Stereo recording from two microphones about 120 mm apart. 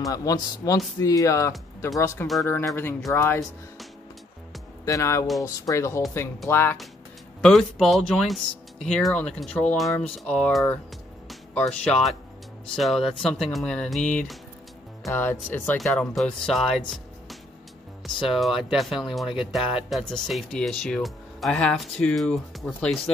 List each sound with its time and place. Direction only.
0.0 s speech: 30° left (ahead or behind)
4.8 s speech: 25° left (ahead or behind)
7.4 s speech: 5° left (ahead or behind)
15.0 s speech: 20° left (ahead or behind)
15.8 s speech: 5° left (ahead or behind)
18.0 s speech: centre (ahead or behind)